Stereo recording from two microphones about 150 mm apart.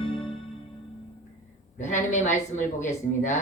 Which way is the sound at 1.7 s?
55° left (ahead or behind).